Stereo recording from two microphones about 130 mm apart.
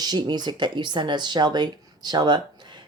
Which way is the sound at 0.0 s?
30° right (ahead or behind).